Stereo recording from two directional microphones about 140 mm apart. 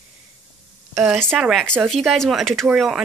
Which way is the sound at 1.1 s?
Centre (ahead or behind).